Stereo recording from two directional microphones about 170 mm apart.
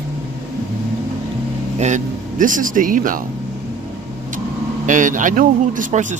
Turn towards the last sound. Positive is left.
turn(degrees=-45)  # may be behind; listen again after turning